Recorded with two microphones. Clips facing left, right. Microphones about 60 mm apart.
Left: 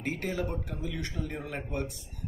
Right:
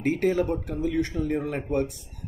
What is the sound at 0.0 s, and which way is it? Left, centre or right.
Speech, right.